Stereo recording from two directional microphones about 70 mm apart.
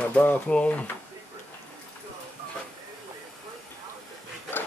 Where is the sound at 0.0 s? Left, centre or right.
Left.